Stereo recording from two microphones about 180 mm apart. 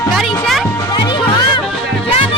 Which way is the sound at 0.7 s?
25° left (ahead or behind).